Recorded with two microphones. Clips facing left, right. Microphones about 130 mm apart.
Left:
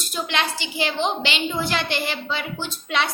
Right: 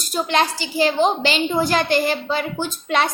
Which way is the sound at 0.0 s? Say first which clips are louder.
Right 6 dB; 40° right (ahead or behind).